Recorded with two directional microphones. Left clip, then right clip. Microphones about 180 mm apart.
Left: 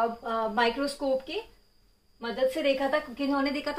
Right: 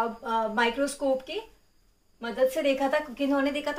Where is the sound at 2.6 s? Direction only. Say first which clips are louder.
Right 1 dB; 15° left (ahead or behind).